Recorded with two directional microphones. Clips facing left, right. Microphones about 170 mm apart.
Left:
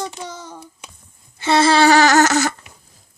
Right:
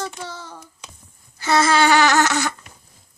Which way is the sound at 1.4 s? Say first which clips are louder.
Left 3 dB; 25° left (ahead or behind).